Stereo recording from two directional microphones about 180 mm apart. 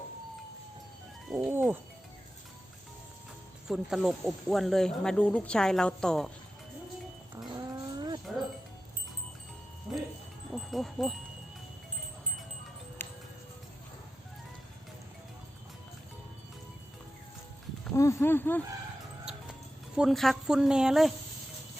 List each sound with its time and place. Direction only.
1.3 s bird: 10° right (ahead or behind)
3.7 s speech: centre (ahead or behind)
7.3 s a sound: 20° right (ahead or behind)
9.9 s music: centre (ahead or behind)
10.5 s wind chime: centre (ahead or behind)
13.0 s music: 15° left (ahead or behind)
17.9 s speech: 15° left (ahead or behind)
20.0 s speech: centre (ahead or behind)